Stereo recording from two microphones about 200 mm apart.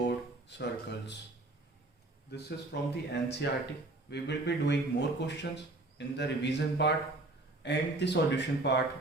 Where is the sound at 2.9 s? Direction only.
60° left (ahead or behind).